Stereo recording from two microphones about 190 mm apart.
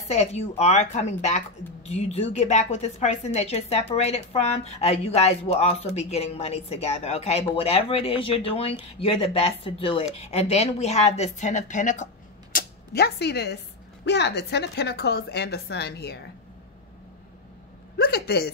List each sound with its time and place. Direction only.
0.1 s a woman's voice: 35° left (ahead or behind)
12.5 s a woman's voice: 55° left (ahead or behind)
17.9 s a woman's voice: 55° left (ahead or behind)